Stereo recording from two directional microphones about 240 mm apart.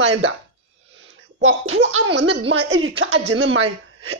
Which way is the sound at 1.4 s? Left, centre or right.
Right.